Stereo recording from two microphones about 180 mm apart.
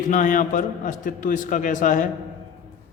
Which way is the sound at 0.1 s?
45° left (ahead or behind).